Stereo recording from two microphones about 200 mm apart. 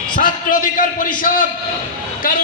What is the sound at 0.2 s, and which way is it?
A man's voice, 45° left (ahead or behind).